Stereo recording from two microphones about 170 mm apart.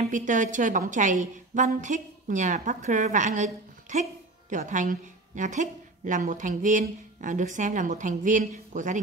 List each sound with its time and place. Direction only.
0.0 s a woman's voice: 50° right (ahead or behind)